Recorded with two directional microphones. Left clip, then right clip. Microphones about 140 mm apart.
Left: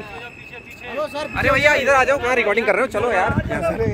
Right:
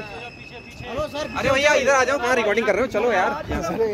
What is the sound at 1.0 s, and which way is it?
A man's voice, centre (ahead or behind).